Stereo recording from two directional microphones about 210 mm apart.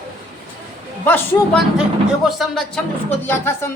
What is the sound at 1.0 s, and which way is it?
Speech, 10° left (ahead or behind).